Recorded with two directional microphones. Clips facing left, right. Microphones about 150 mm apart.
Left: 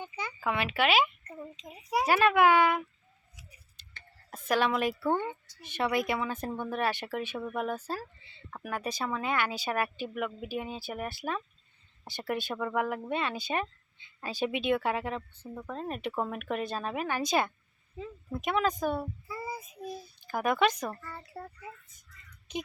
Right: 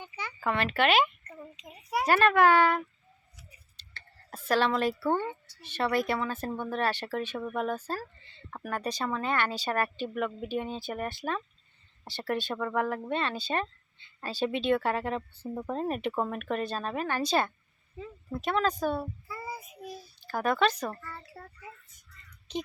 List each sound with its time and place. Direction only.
0.0 s speech: 10° left (ahead or behind)
4.4 s speech: 10° left (ahead or behind)
7.9 s a sound: 10° left (ahead or behind)
8.6 s speech: 10° left (ahead or behind)
15.4 s speech: 20° right (ahead or behind)
15.9 s speech: 5° right (ahead or behind)
16.3 s speech: 10° left (ahead or behind)
19.3 s child singing: 20° left (ahead or behind)
20.2 s speech: 15° left (ahead or behind)
22.5 s speech: 10° left (ahead or behind)